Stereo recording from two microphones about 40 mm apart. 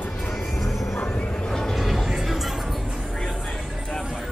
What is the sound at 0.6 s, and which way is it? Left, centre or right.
Music, centre.